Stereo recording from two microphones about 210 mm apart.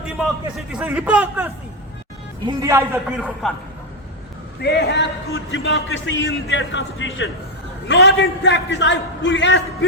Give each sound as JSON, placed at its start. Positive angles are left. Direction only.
{"t": 0.7, "sound": "a man's voice", "side_deg": -5}
{"t": 2.5, "sound": "a man's voice", "side_deg": -15}
{"t": 4.6, "sound": "a man's voice", "side_deg": 50}